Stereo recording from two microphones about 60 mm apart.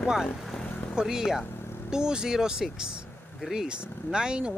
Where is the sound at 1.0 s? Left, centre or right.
Centre.